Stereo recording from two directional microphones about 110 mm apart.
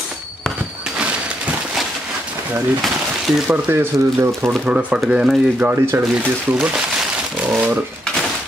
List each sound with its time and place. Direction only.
2.8 s a sound: centre (ahead or behind)
3.4 s speech: 20° right (ahead or behind)
4.6 s speech: 10° right (ahead or behind)
7.4 s speech: 15° right (ahead or behind)